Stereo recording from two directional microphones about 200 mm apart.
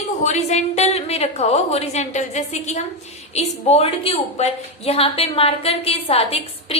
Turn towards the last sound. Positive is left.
turn(degrees=30)  # may be behind; listen again after turning